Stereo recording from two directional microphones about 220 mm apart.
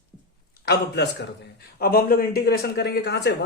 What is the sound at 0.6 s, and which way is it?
A man's voice, 45° left (ahead or behind).